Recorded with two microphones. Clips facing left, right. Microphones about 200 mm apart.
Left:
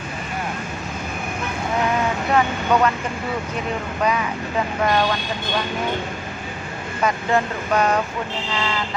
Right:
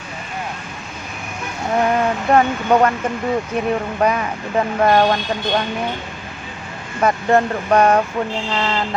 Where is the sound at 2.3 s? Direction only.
50° right (ahead or behind).